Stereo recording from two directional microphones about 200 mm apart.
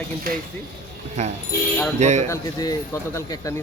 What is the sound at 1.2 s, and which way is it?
Speech, 35° right (ahead or behind).